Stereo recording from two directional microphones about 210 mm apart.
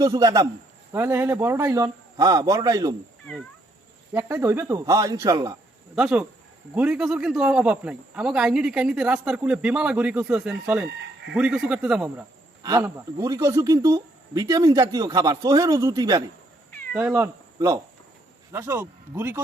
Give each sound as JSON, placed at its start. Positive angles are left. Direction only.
{"t": 0.0, "sound": "speech", "side_deg": -15}
{"t": 4.1, "sound": "speech", "side_deg": -10}
{"t": 6.0, "sound": "a man's voice", "side_deg": -5}
{"t": 12.6, "sound": "speech", "side_deg": -15}